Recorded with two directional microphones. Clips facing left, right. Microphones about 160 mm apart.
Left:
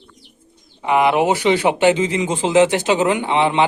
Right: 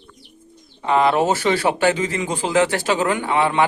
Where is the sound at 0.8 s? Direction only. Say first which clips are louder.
Left 1 dB; 15° left (ahead or behind).